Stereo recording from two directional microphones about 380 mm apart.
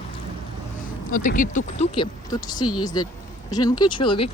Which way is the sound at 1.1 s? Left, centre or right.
Left.